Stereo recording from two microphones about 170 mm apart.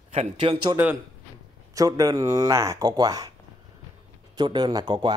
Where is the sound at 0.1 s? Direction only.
35° right (ahead or behind).